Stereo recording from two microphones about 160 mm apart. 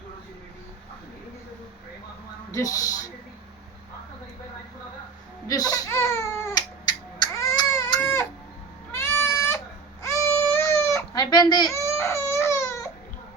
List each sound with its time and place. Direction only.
2.5 s speech: 20° left (ahead or behind)
5.5 s baby cry: 20° left (ahead or behind)
7.9 s goat: 10° left (ahead or behind)
10.3 s chicken: 15° left (ahead or behind)